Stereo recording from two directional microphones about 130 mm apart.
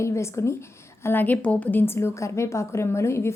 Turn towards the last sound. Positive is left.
turn(degrees=20)  # may be behind; listen again after turning